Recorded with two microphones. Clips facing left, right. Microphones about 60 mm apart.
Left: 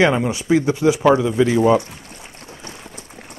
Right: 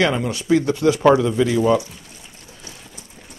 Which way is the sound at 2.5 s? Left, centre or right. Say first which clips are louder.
Left 5 dB; left.